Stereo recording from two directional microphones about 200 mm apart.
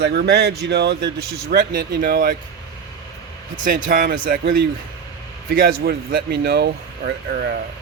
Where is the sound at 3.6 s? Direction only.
45° right (ahead or behind).